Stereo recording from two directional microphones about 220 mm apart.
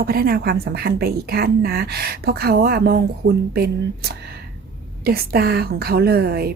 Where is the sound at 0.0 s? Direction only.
45° right (ahead or behind).